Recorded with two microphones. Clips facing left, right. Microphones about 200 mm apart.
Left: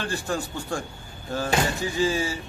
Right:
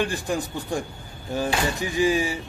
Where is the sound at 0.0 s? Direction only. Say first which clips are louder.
Right 3 dB; 15° right (ahead or behind).